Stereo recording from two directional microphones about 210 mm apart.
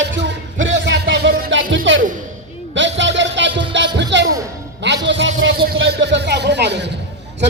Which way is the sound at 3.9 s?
55° right (ahead or behind).